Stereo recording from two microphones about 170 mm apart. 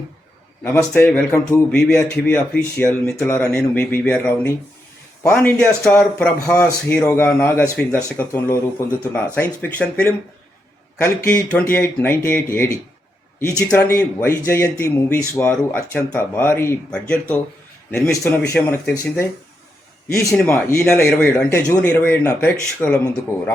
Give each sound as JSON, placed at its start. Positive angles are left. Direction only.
{"t": 0.6, "sound": "a man's voice", "side_deg": 15}
{"t": 20.3, "sound": "a man's voice", "side_deg": 5}